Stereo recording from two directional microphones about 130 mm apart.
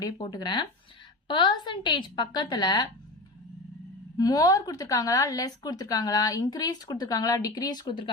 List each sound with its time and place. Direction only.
0.0 s a woman's voice: 30° left (ahead or behind)
4.2 s speech: 30° left (ahead or behind)